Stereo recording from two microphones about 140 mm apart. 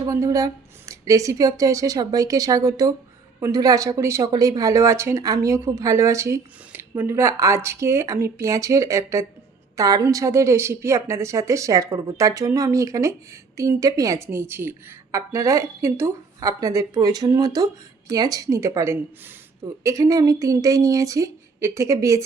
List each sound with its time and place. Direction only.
0.0 s a woman's voice: 20° right (ahead or behind)